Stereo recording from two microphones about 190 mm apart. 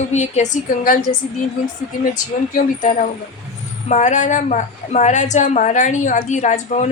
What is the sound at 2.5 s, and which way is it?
A woman's voice, 40° left (ahead or behind).